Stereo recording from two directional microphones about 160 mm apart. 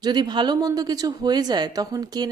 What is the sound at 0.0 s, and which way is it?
Speech, 25° right (ahead or behind).